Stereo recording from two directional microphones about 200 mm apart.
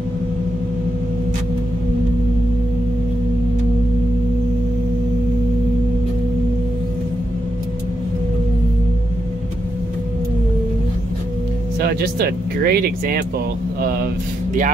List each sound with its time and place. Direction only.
11.8 s speech: 50° right (ahead or behind)